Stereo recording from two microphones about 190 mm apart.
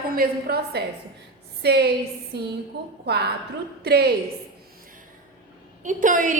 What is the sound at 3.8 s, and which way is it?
Speech, 60° right (ahead or behind).